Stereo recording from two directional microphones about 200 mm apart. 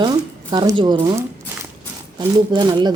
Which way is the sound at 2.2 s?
20° right (ahead or behind).